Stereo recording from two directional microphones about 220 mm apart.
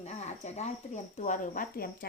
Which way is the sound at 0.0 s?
30° left (ahead or behind).